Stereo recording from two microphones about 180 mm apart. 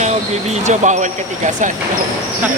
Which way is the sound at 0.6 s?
40° right (ahead or behind).